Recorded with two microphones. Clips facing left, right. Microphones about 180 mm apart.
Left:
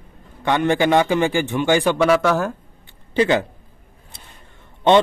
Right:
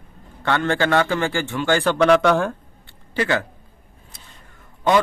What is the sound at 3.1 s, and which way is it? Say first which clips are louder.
Speech: left 5 dB; 20° left (ahead or behind).